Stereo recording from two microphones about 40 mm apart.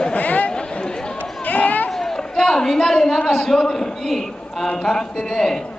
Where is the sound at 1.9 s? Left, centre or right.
Centre.